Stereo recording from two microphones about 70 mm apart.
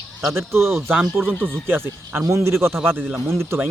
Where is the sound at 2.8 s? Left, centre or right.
Right.